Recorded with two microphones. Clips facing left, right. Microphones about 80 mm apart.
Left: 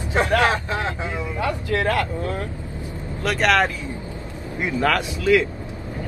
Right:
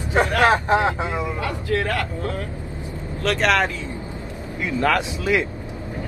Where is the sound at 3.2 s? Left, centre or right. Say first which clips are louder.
Right 1 dB; centre.